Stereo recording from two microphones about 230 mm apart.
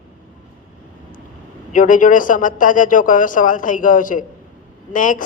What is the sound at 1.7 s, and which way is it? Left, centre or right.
A woman's voice, left.